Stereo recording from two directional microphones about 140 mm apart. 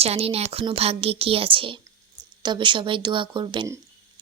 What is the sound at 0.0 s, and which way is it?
Speech, 45° right (ahead or behind).